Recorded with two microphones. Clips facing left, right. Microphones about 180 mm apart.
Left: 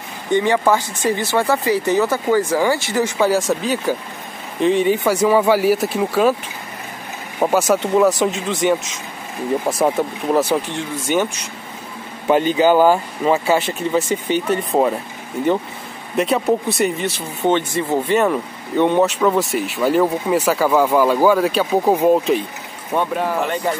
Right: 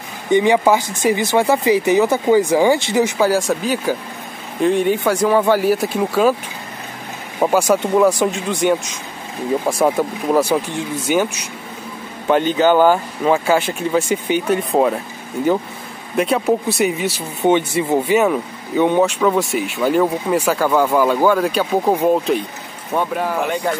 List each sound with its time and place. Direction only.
0.3 s speech: 15° right (ahead or behind)
3.2 s speech: centre (ahead or behind)
7.3 s speech: centre (ahead or behind)
12.3 s speech: 5° left (ahead or behind)
16.2 s speech: centre (ahead or behind)